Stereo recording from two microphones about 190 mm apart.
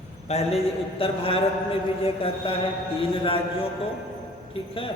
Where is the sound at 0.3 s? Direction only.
35° left (ahead or behind).